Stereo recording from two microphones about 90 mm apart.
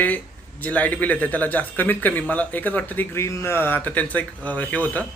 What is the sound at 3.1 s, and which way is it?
Speech, 30° left (ahead or behind).